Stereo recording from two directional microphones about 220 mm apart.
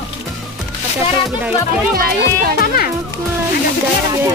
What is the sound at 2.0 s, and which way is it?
Speech, 45° right (ahead or behind).